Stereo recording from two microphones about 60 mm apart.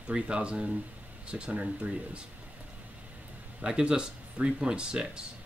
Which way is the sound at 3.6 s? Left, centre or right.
Centre.